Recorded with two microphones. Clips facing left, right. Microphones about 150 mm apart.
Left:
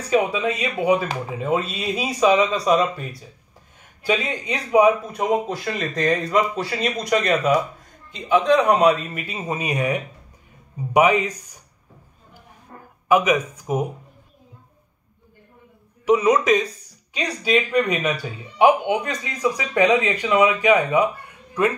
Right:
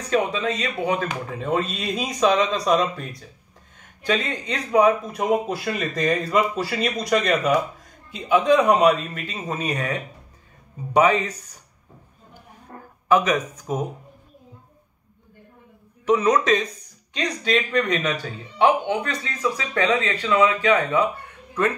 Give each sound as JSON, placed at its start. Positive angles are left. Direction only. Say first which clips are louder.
{"t": 0.1, "sound": "speech", "louder": "left 2 dB", "side_deg": 10}
{"t": 5.1, "sound": "speech", "louder": "even", "side_deg": -5}
{"t": 13.1, "sound": "speech", "louder": "left 1 dB", "side_deg": 10}
{"t": 16.1, "sound": "speech", "louder": "left 2 dB", "side_deg": 10}